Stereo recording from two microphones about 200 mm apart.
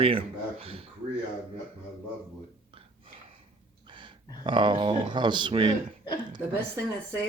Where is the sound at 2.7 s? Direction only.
30° right (ahead or behind).